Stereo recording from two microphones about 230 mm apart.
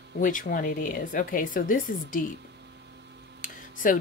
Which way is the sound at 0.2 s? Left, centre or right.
Left.